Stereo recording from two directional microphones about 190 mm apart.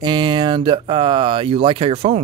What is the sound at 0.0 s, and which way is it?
Speech, 25° right (ahead or behind).